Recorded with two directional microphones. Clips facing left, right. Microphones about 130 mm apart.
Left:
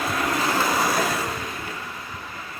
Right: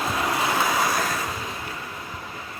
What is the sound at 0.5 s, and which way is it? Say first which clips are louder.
Vehicle: left 1 dB; 5° left (ahead or behind).